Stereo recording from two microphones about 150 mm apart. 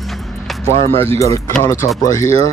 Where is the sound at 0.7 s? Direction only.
40° right (ahead or behind).